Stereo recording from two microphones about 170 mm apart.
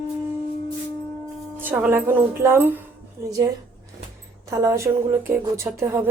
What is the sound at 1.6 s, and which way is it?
Speech, 10° right (ahead or behind).